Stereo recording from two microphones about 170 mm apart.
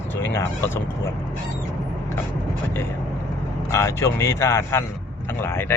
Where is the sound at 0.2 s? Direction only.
15° left (ahead or behind).